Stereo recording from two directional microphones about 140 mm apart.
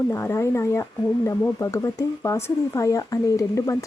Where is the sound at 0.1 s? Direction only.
20° left (ahead or behind).